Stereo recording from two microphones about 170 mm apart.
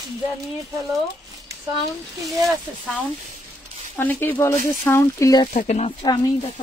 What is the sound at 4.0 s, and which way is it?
Speech, 10° left (ahead or behind).